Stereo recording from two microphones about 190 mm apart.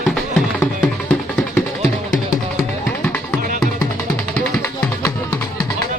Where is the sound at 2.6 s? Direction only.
15° left (ahead or behind).